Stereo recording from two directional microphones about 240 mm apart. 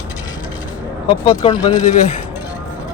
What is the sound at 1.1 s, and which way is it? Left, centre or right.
Speech, left.